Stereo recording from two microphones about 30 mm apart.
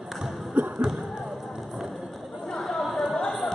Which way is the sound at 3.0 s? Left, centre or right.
Centre.